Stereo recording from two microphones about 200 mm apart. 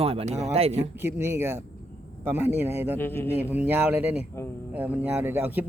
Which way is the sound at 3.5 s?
10° right (ahead or behind).